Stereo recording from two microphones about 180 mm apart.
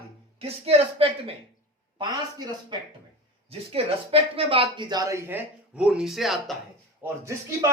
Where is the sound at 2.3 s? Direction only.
20° right (ahead or behind).